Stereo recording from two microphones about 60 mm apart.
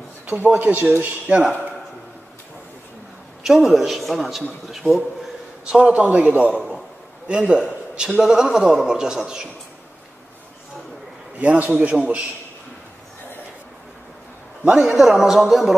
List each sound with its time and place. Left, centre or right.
0.4 s a man's voice: right
3.4 s a man's voice: centre
5.7 s a man's voice: right
11.3 s a man's voice: right
14.6 s a man's voice: centre